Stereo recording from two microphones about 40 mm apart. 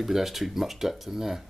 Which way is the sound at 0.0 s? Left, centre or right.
Centre.